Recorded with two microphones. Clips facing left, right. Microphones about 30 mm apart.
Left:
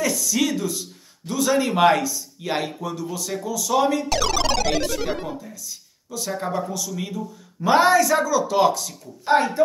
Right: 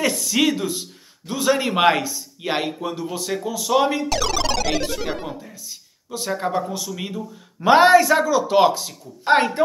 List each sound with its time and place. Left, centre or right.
0.0 s speech: right
4.1 s music: centre
4.8 s speech: centre
5.5 s speech: right
9.3 s a woman's voice: right